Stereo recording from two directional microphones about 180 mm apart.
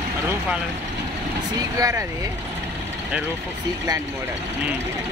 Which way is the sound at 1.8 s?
20° right (ahead or behind).